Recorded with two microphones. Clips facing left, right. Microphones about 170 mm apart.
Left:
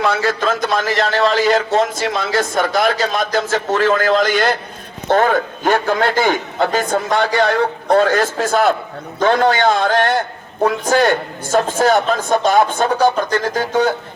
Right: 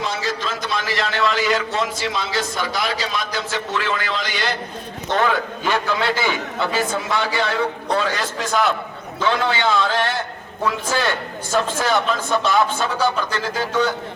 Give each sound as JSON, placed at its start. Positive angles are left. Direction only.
{"t": 0.0, "sound": "a man's voice", "side_deg": 55}